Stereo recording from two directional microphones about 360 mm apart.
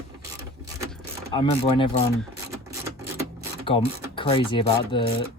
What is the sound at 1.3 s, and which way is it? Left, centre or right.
Speech, centre.